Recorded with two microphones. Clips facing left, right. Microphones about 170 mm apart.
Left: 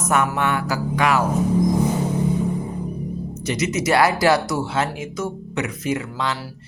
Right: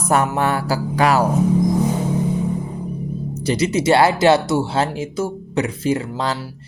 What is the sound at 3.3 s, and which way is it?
Speech, 30° right (ahead or behind).